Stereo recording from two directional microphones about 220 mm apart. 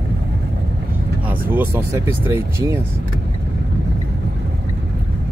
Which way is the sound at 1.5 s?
10° right (ahead or behind).